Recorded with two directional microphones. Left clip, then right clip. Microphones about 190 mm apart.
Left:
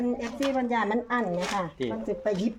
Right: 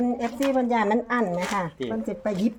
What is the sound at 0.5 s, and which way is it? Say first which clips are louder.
Speech: right 4 dB; 65° right (ahead or behind).